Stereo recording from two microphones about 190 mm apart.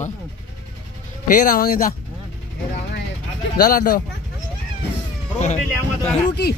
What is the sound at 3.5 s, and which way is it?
Speech, 50° left (ahead or behind).